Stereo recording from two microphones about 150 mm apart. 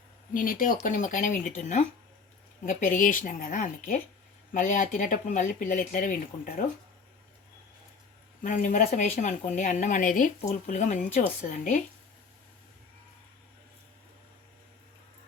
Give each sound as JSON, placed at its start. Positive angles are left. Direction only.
{"t": 0.3, "sound": "a woman's voice", "side_deg": 65}
{"t": 8.4, "sound": "a woman's voice", "side_deg": 60}